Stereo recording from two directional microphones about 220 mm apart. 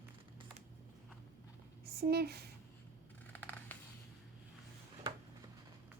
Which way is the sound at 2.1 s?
45° right (ahead or behind).